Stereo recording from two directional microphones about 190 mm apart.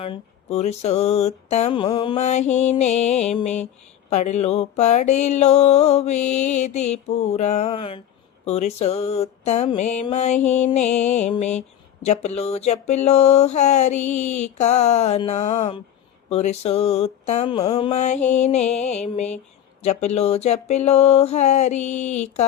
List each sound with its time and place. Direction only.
0.0 s mantra: 30° left (ahead or behind)